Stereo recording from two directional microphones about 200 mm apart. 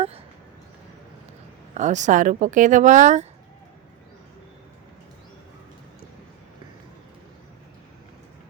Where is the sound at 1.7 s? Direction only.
35° right (ahead or behind).